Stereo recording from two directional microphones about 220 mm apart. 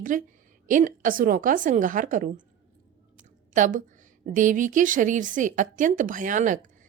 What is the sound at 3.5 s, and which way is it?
A woman's voice, 35° right (ahead or behind).